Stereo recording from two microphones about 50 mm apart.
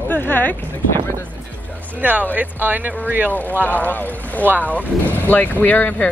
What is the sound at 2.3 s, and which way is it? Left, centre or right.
Speech, right.